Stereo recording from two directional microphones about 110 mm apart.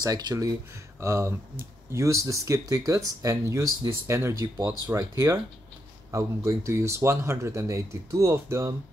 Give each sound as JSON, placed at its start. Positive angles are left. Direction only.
{"t": 0.0, "sound": "speech", "side_deg": -35}